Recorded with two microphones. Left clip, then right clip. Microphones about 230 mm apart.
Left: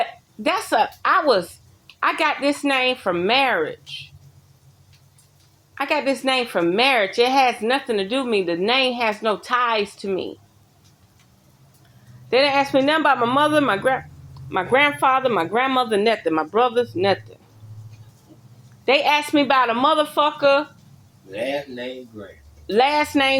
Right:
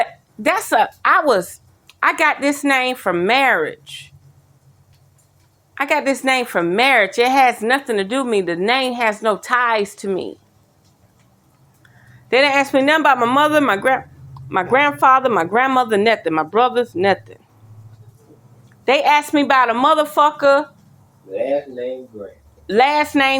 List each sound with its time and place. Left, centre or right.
0.0 s a woman's voice: right
5.7 s a woman's voice: right
12.3 s a woman's voice: right
18.9 s speech: right
22.6 s speech: right